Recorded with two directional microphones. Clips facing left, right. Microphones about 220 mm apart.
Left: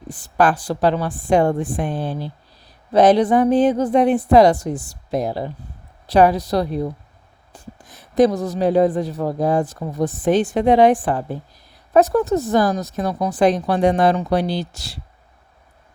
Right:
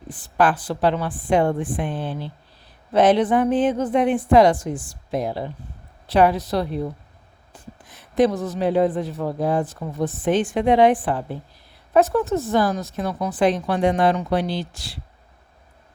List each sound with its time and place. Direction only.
0.1 s speech: 40° left (ahead or behind)
7.9 s speech: 40° left (ahead or behind)